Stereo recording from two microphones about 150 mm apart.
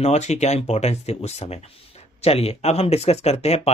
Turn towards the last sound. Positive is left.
turn(degrees=45)  # may be behind; listen again after turning